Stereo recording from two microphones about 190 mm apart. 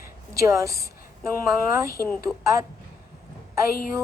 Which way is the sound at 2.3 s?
Centre (ahead or behind).